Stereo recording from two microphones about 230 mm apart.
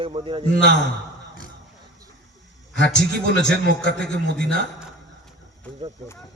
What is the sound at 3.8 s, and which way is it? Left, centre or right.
Speech, left.